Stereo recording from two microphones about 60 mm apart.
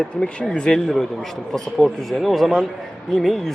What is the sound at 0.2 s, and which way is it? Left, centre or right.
Speech, centre.